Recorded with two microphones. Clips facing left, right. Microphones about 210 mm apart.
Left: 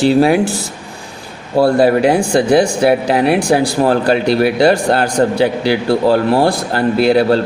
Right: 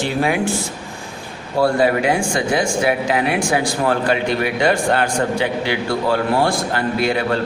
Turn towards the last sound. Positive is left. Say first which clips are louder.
# left 8 dB
turn(degrees=35)  # may be behind; listen again after turning